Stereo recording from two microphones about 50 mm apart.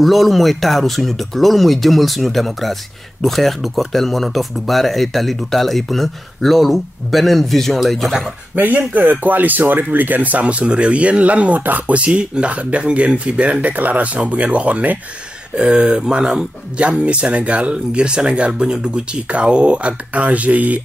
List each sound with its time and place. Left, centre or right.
0.0 s speech: centre
8.5 s speech: right
15.5 s speech: centre